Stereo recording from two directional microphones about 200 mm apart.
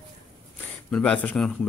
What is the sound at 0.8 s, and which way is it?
Speech, 5° left (ahead or behind).